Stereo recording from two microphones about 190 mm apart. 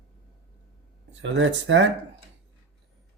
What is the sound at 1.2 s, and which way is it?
Speech, 80° right.